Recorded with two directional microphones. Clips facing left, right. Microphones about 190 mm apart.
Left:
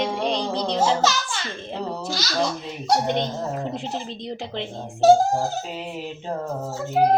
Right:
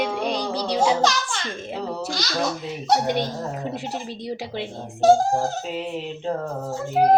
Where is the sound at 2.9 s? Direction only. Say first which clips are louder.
Even; 10° right (ahead or behind).